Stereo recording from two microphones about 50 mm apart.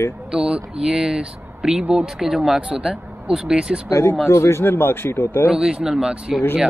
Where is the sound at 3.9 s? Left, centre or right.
Left.